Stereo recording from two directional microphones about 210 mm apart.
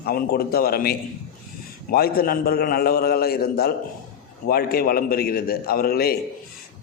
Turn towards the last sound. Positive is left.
turn(degrees=45)  # may be behind; listen again after turning